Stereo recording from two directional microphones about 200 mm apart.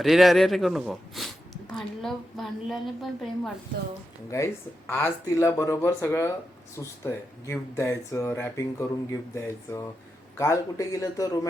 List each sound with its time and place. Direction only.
0.0 s a woman's voice: centre (ahead or behind)
4.9 s speech: 10° left (ahead or behind)